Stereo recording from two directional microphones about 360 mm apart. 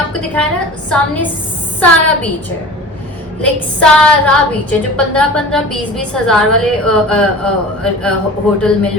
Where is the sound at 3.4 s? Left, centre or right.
Centre.